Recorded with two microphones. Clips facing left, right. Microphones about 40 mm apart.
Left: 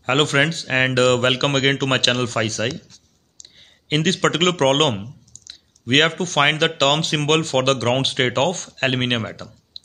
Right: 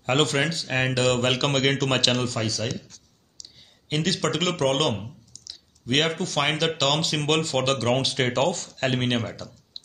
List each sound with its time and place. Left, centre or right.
0.0 s speech: left